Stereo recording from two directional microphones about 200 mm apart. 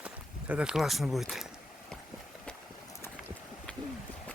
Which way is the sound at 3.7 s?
5° left (ahead or behind).